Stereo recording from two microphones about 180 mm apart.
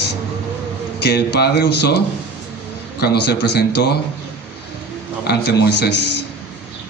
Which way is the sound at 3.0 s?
65° left (ahead or behind).